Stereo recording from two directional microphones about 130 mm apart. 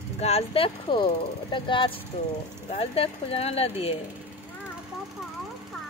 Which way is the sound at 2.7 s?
50° left (ahead or behind).